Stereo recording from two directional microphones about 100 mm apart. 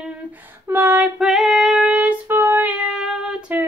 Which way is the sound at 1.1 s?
Centre (ahead or behind).